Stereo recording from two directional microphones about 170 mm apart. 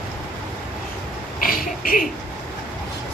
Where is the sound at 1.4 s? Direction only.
55° left (ahead or behind).